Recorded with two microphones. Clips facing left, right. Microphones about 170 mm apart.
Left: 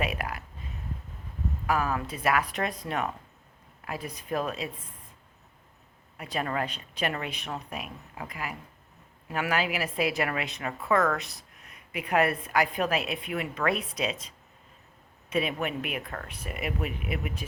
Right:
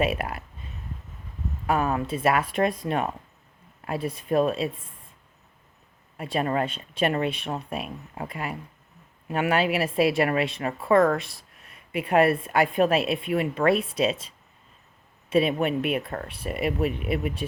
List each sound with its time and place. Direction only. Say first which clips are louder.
0.0 s a woman's voice: right 6 dB; 25° right (ahead or behind)
1.6 s a woman's voice: right 4 dB; 25° right (ahead or behind)
6.1 s a woman's voice: right 5 dB; 25° right (ahead or behind)